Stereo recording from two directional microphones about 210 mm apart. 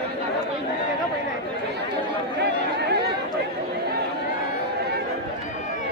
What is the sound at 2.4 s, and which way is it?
Chatter, 55° right (ahead or behind).